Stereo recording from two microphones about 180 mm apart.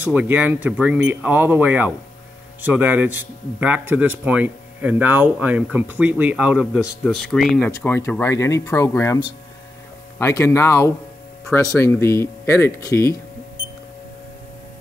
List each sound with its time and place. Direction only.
0.0 s speech: 10° right (ahead or behind)
7.7 s speech: 15° left (ahead or behind)